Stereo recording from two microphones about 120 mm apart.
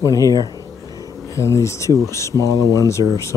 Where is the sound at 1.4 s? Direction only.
25° left (ahead or behind).